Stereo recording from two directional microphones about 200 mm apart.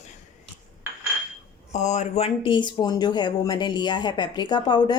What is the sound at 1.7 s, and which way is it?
Speech, 35° left (ahead or behind).